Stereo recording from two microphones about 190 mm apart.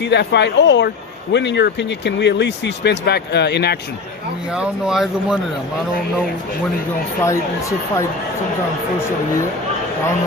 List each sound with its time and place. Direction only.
0.0 s speech: 65° left (ahead or behind)
4.5 s speech: 5° right (ahead or behind)
7.3 s speech: 15° left (ahead or behind)